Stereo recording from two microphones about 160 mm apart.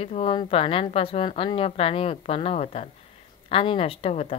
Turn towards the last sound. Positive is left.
turn(degrees=40)  # may be behind; listen again after turning